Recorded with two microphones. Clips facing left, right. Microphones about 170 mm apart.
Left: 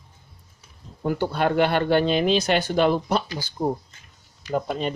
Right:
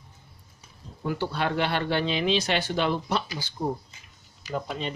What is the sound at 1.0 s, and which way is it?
Speech, 50° left (ahead or behind).